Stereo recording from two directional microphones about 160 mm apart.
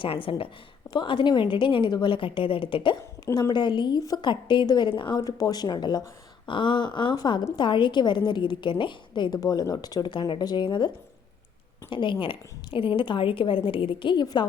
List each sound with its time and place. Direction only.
0.0 s a woman's voice: 35° left (ahead or behind)
3.0 s a woman's voice: 20° left (ahead or behind)